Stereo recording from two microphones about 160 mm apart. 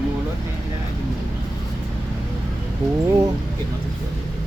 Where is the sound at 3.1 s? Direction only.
25° right (ahead or behind).